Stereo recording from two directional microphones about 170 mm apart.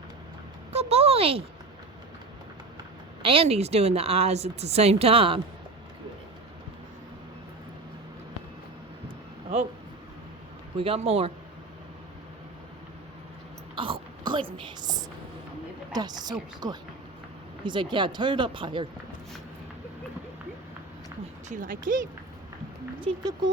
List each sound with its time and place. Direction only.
0.7 s a sound: 40° right (ahead or behind)
3.2 s speech: 35° right (ahead or behind)
10.8 s speech: 35° right (ahead or behind)
13.7 s a sound: 30° right (ahead or behind)
15.9 s speech: 25° right (ahead or behind)
21.5 s speech: 50° right (ahead or behind)
23.1 s speech: 35° right (ahead or behind)